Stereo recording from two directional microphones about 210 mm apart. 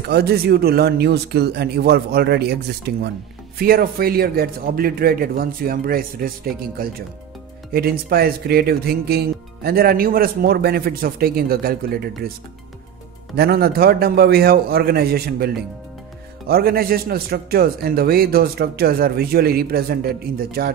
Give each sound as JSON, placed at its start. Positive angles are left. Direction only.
{"t": 0.1, "sound": "speech", "side_deg": -50}
{"t": 13.4, "sound": "speech", "side_deg": -45}